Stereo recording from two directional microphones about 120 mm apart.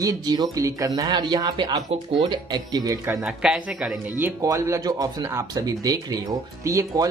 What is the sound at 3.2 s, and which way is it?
Speech, 5° right (ahead or behind).